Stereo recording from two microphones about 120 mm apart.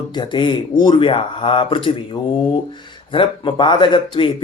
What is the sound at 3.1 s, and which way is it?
Speech, 45° left (ahead or behind).